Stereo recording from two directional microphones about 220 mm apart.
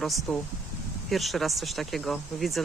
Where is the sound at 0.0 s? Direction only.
Centre (ahead or behind).